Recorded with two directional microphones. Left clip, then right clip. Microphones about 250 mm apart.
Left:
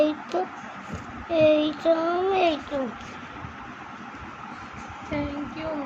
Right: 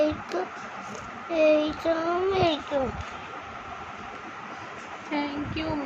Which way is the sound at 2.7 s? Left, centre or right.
Right.